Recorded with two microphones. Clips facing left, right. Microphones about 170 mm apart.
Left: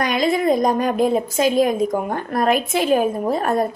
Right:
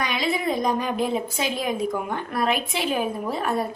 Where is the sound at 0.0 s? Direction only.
45° left (ahead or behind).